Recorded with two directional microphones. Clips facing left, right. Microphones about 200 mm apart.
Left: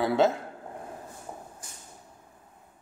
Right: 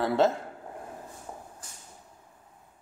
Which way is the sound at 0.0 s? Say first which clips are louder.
Left 1 dB; centre (ahead or behind).